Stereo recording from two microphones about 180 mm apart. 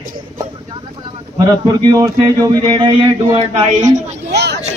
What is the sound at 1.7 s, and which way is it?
A man's voice, 20° right (ahead or behind).